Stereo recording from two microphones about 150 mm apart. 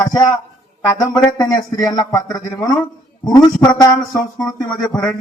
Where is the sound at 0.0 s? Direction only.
25° left (ahead or behind).